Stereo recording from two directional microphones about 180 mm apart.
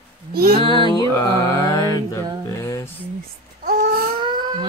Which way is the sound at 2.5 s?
20° left (ahead or behind).